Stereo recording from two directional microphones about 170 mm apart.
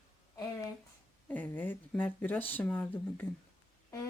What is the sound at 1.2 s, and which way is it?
Speech, 10° left (ahead or behind).